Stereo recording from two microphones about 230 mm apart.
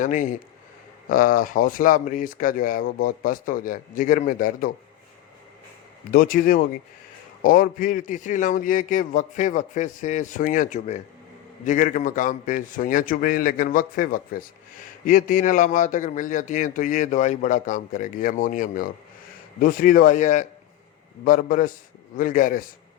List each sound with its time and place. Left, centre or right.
0.0 s a man's voice: left
6.1 s a man's voice: left